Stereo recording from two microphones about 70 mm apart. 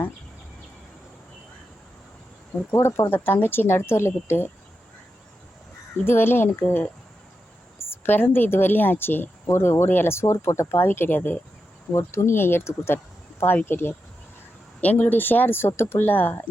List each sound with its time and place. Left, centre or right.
2.7 s a woman's voice: left
6.1 s a woman's voice: left
7.9 s a woman's voice: left
11.9 s a woman's voice: left